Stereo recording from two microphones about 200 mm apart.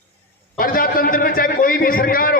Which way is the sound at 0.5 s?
45° left (ahead or behind).